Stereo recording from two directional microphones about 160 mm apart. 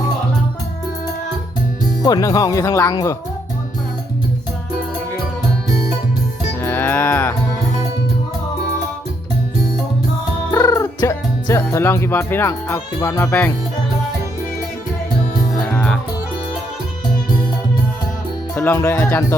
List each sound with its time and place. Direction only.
2.0 s speech: 25° left (ahead or behind)
6.6 s music: 15° left (ahead or behind)
10.5 s speech: 20° left (ahead or behind)
15.7 s music: 5° left (ahead or behind)
18.5 s speech: 15° left (ahead or behind)